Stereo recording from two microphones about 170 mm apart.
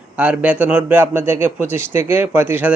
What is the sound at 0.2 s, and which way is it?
A man's voice, 10° right (ahead or behind).